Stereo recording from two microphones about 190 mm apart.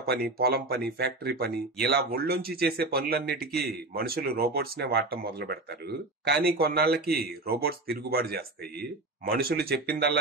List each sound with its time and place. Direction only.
0.1 s speech: 55° right (ahead or behind)